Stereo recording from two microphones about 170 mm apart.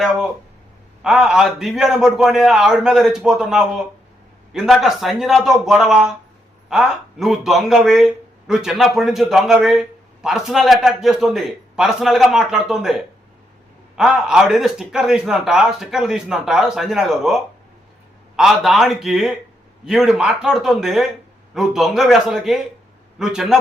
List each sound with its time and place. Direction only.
1.0 s a man's voice: 5° right (ahead or behind)